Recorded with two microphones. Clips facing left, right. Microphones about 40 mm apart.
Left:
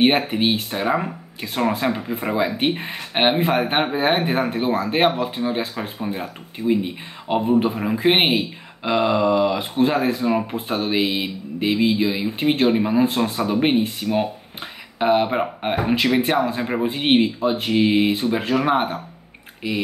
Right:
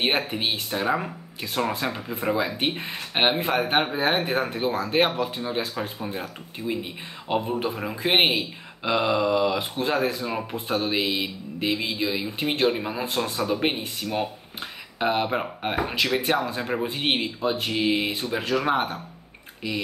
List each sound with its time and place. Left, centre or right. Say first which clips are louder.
0.0 s speech: left 7 dB; centre